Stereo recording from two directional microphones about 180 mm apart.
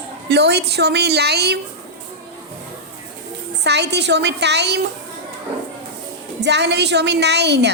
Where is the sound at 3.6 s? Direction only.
70° right (ahead or behind).